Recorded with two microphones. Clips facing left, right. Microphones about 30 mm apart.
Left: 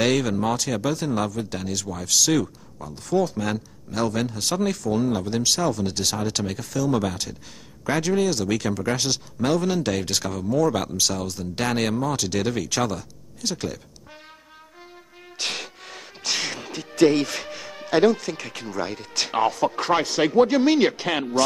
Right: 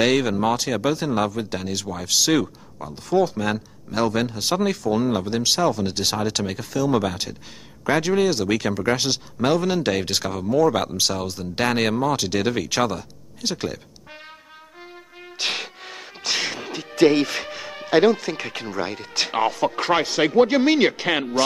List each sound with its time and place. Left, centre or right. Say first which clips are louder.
0.0 s speech: right 2 dB; centre
15.3 s music: right 3 dB; right
19.4 s speech: even; centre
20.6 s speech: right 1 dB; centre